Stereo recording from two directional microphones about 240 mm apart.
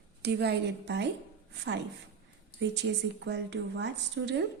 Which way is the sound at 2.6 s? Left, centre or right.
Right.